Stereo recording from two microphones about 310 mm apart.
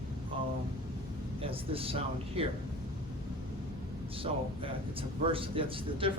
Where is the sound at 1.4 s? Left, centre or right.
Centre.